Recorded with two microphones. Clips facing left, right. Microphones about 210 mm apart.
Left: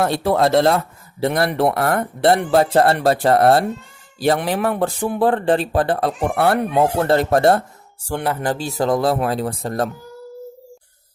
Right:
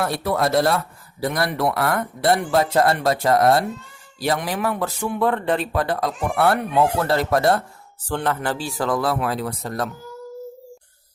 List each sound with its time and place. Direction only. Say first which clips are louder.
0.0 s speech: left 5 dB; 25° left (ahead or behind)
8.0 s speech: left 1 dB; 10° left (ahead or behind)
8.8 s speech: left 4 dB; 25° left (ahead or behind)